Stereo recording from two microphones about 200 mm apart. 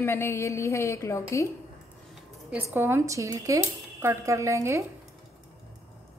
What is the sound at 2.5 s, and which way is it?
Speech, 10° right (ahead or behind).